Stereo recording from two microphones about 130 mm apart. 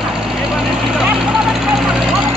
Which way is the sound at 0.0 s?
5° right (ahead or behind).